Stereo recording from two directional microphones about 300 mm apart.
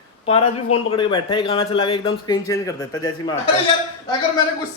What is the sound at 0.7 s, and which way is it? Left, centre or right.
Speech, centre.